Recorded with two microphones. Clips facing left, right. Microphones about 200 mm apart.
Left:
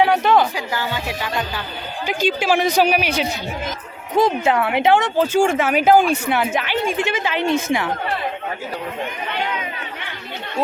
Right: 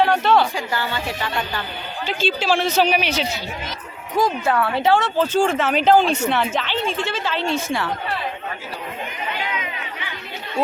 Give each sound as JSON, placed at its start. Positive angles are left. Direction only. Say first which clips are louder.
{"t": 0.0, "sound": "speech", "louder": "left 1 dB", "side_deg": 15}
{"t": 4.2, "sound": "speech", "louder": "left 2 dB", "side_deg": 20}